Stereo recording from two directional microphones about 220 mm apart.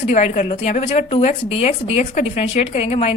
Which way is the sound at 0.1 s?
35° left (ahead or behind).